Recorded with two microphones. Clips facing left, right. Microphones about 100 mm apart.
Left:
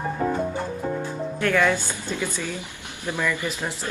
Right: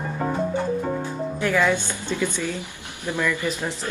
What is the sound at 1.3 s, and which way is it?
Speech, 15° right (ahead or behind).